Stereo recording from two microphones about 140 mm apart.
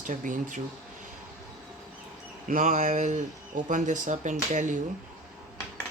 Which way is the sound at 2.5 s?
65° right (ahead or behind).